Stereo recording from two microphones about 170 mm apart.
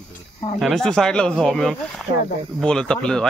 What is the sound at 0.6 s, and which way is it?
Speech, centre (ahead or behind).